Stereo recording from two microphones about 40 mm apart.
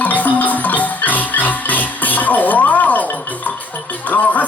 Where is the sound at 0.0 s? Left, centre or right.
Left.